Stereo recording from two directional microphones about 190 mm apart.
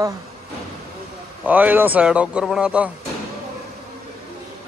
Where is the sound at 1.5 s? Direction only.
10° right (ahead or behind).